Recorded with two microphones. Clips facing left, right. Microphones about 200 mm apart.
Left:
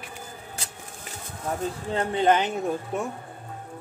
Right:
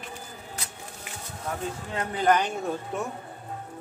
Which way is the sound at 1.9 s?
30° left (ahead or behind).